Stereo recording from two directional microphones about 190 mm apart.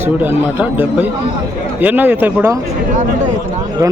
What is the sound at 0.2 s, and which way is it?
A man's voice, 10° right (ahead or behind).